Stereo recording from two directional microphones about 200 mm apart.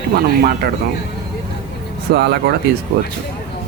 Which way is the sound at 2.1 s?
55° right (ahead or behind).